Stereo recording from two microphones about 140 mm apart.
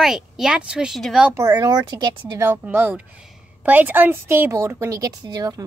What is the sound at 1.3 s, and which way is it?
Speech, 30° right (ahead or behind).